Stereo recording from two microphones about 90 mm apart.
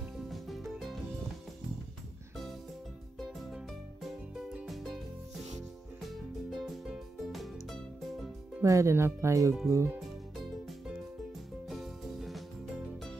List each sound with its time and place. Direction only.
0.3 s music: centre (ahead or behind)
3.2 s music: centre (ahead or behind)
6.0 s music: centre (ahead or behind)
8.6 s speech: 35° right (ahead or behind)
11.7 s music: centre (ahead or behind)